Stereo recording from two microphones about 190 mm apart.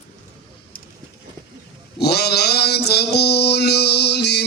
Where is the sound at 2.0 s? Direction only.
60° left (ahead or behind).